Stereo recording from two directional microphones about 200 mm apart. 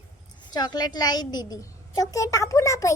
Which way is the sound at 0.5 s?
20° left (ahead or behind).